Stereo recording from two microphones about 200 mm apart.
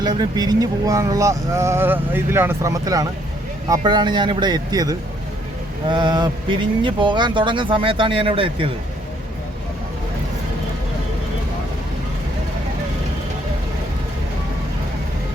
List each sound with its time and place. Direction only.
0.0 s speech: 20° right (ahead or behind)